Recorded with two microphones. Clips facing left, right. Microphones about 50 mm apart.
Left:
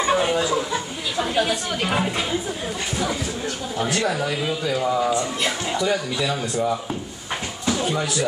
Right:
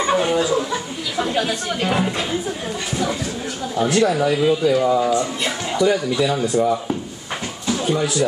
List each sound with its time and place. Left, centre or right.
0.1 s speech: centre
1.4 s speech: centre
3.7 s speech: centre
7.7 s speech: centre